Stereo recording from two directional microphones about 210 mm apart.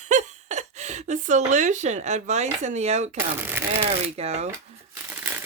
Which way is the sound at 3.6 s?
10° right (ahead or behind).